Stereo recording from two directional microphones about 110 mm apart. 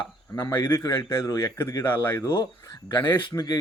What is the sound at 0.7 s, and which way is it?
Speech, 25° left (ahead or behind).